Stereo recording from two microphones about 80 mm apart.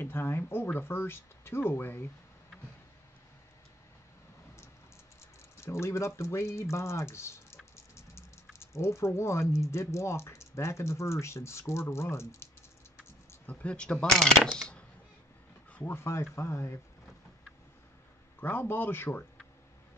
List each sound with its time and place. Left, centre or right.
0.0 s speech: left
5.6 s speech: left
7.7 s music: left
8.5 s speech: left
13.5 s speech: centre
15.7 s speech: left
18.4 s speech: left